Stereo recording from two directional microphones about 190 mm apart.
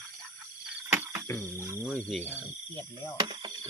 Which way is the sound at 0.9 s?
10° right (ahead or behind).